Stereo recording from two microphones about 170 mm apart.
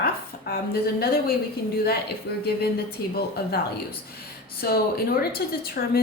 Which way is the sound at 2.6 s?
70° left (ahead or behind).